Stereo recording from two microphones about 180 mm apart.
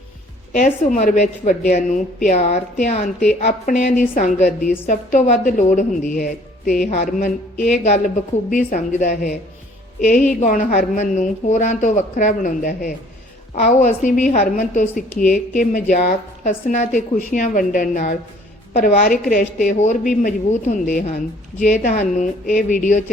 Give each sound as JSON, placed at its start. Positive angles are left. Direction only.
{"t": 0.5, "sound": "a woman's voice", "side_deg": 45}